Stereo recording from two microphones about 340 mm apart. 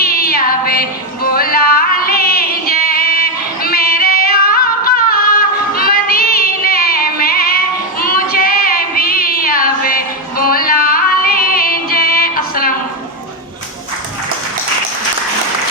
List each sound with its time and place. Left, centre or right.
0.0 s music: left
5.7 s music: left